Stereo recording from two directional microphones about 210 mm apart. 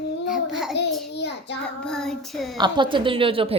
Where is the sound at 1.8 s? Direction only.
Centre (ahead or behind).